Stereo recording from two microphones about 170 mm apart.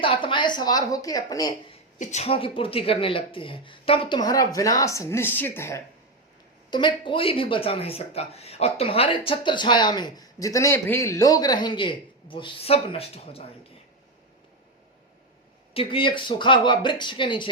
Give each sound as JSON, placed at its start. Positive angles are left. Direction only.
{"t": 0.0, "sound": "speech", "side_deg": 30}
{"t": 1.7, "sound": "speech", "side_deg": 45}
{"t": 6.7, "sound": "speech", "side_deg": 25}
{"t": 15.7, "sound": "speech", "side_deg": 35}